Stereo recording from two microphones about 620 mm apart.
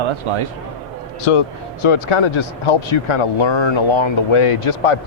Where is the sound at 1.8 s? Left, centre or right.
Left.